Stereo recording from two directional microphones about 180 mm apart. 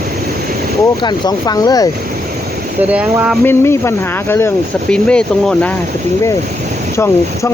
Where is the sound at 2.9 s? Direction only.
5° right (ahead or behind).